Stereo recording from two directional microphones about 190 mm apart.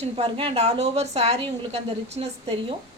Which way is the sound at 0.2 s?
30° right (ahead or behind).